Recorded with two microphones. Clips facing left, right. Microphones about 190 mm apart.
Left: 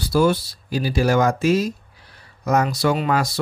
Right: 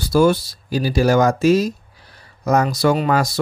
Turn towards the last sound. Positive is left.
turn(degrees=-45)  # may be behind; listen again after turning